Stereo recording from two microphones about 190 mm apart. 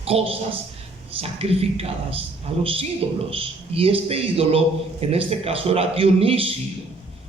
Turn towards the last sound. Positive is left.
turn(degrees=-30)  # may be behind; listen again after turning